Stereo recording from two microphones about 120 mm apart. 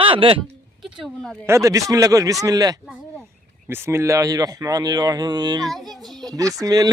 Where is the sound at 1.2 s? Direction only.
5° left (ahead or behind).